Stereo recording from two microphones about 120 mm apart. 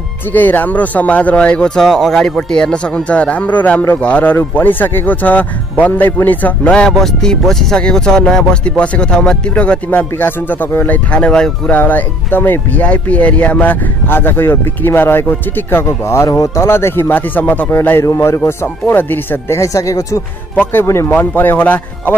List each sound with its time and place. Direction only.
0.3 s speech: 15° left (ahead or behind)